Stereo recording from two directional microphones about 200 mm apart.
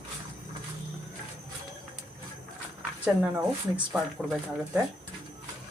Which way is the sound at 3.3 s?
5° right (ahead or behind).